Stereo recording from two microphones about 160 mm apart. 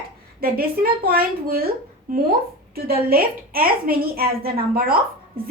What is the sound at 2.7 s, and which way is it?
A woman's voice, 70° right (ahead or behind).